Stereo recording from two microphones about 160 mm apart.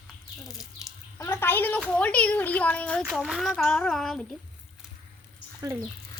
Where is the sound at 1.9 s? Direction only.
10° left (ahead or behind).